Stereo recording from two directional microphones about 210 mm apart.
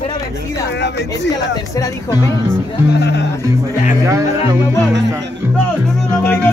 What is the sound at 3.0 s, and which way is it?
Speech, 50° left (ahead or behind).